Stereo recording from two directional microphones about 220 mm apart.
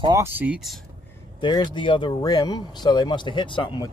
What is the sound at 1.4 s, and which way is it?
Speech, 20° left (ahead or behind).